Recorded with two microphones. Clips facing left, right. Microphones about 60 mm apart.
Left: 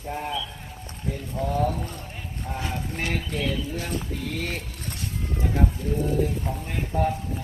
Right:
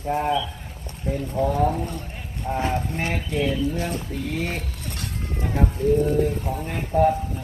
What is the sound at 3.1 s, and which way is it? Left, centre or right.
Speech, centre.